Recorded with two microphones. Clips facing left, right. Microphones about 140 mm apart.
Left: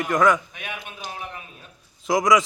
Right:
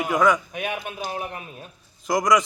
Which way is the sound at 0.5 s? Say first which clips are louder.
Right 7 dB; 45° right (ahead or behind).